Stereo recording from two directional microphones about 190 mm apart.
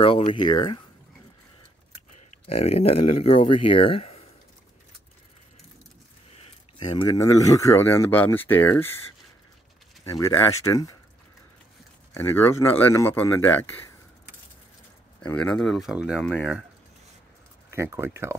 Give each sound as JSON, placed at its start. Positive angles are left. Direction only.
{"t": 0.0, "sound": "speech", "side_deg": 30}
{"t": 2.4, "sound": "speech", "side_deg": 30}
{"t": 6.3, "sound": "speech", "side_deg": 25}
{"t": 10.1, "sound": "speech", "side_deg": 15}
{"t": 12.1, "sound": "speech", "side_deg": 10}
{"t": 15.3, "sound": "speech", "side_deg": 5}
{"t": 17.6, "sound": "speech", "side_deg": -15}